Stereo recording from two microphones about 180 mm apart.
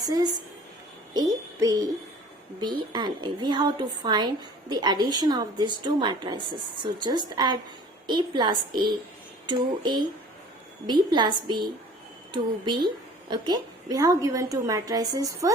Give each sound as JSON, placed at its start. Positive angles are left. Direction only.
{"t": 0.0, "sound": "a woman's voice", "side_deg": -20}
{"t": 1.1, "sound": "music", "side_deg": -20}
{"t": 2.6, "sound": "a woman's voice", "side_deg": -25}